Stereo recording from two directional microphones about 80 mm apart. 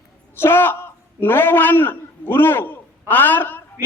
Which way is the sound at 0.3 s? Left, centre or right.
Left.